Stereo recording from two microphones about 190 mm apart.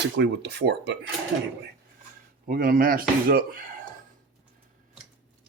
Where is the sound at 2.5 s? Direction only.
50° right (ahead or behind).